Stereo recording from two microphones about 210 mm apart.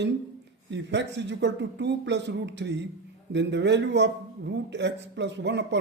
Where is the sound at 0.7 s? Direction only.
55° right (ahead or behind).